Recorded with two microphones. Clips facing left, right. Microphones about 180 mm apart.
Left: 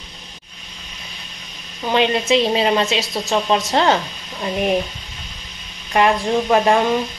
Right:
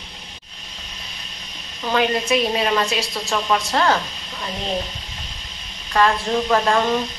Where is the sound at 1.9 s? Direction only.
25° left (ahead or behind).